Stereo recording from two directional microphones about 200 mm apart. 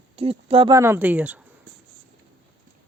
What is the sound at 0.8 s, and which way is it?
Speech, 10° right (ahead or behind).